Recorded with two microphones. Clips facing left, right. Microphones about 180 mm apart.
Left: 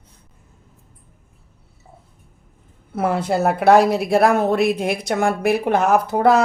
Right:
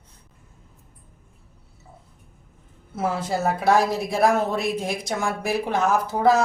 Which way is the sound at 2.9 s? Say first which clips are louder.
Left 5 dB; 60° left (ahead or behind).